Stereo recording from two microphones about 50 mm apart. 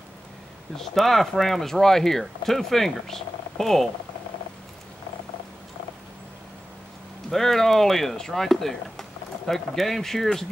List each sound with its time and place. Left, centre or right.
0.7 s speech: centre
7.2 s speech: centre